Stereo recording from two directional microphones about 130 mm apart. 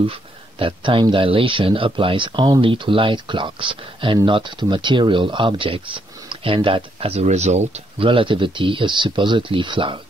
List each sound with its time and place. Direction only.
0.0 s speech: 45° right (ahead or behind)
8.0 s speech: 45° right (ahead or behind)